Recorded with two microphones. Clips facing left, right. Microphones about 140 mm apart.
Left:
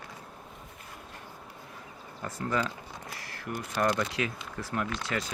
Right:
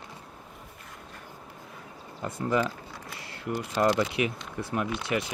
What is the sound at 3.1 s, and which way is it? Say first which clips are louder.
Camera: right 5 dB; 25° right (ahead or behind).